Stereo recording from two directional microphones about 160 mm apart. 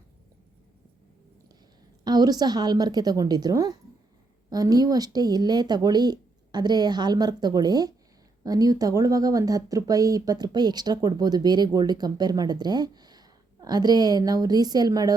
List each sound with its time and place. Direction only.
2.0 s speech: 25° right (ahead or behind)